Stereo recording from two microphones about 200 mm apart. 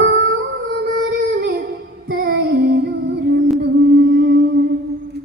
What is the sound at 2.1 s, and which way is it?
Female singing, 55° right (ahead or behind).